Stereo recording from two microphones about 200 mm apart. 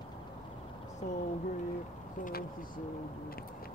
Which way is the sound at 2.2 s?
50° left (ahead or behind).